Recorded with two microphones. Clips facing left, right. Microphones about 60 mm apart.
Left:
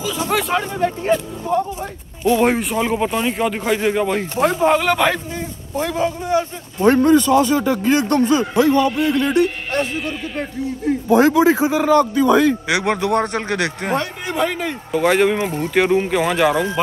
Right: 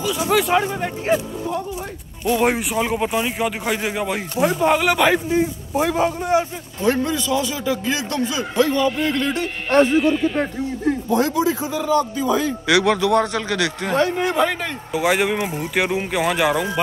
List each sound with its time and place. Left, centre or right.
0.3 s a man's voice: centre
2.2 s speech: centre
5.1 s a man's voice: centre
6.8 s a man's voice: left
8.5 s speech: centre
11.1 s a man's voice: left
12.2 s speech: left
12.6 s a man's voice: left
13.9 s speech: centre